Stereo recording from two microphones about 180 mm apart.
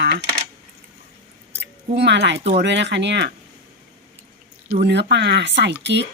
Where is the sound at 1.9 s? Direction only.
70° right (ahead or behind).